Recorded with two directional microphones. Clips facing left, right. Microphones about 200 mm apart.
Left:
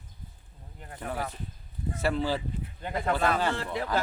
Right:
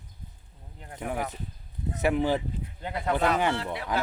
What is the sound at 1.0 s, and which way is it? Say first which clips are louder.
Speech: right 2 dB; 15° right (ahead or behind).